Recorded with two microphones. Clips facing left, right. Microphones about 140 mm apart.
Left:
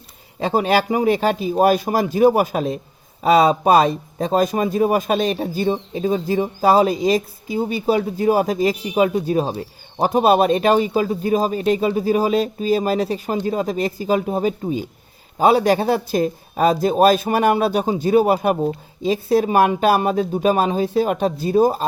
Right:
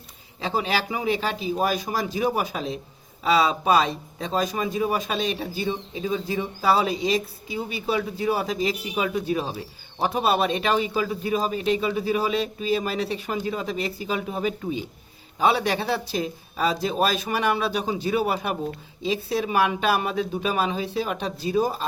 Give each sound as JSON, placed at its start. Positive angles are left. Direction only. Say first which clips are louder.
{"t": 0.3, "sound": "speech", "louder": "left 8 dB", "side_deg": 50}